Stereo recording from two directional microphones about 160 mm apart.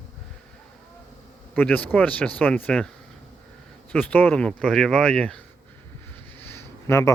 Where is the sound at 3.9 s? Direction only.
10° left (ahead or behind).